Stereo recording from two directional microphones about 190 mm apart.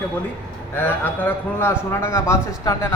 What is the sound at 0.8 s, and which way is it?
A man's voice, 10° left (ahead or behind).